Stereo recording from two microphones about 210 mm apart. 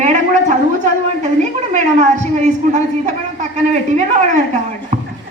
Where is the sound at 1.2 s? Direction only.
35° right (ahead or behind).